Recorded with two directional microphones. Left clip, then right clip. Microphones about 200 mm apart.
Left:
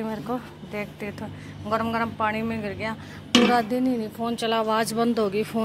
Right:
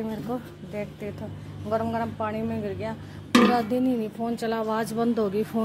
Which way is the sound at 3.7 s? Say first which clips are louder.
Even; 10° right (ahead or behind).